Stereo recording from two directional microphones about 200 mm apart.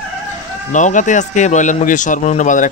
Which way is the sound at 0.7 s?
40° left (ahead or behind).